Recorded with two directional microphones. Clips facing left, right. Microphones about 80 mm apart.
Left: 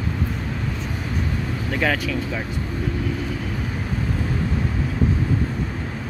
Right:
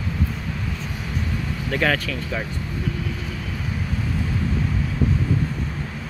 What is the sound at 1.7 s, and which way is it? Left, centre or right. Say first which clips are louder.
Speech: even; centre.